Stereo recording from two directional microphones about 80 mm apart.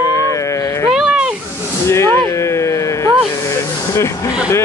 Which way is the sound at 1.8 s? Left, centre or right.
Left.